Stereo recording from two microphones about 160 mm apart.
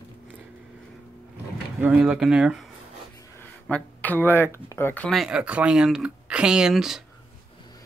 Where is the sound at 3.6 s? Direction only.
10° left (ahead or behind).